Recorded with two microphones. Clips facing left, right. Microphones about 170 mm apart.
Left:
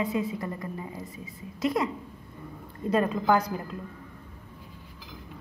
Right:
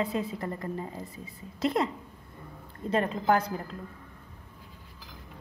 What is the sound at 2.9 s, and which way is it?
Speech, 30° right (ahead or behind).